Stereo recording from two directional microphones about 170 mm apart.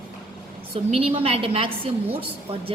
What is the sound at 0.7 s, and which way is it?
A woman's voice, 35° right (ahead or behind).